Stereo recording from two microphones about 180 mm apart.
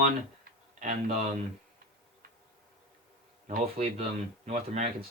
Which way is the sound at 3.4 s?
40° right (ahead or behind).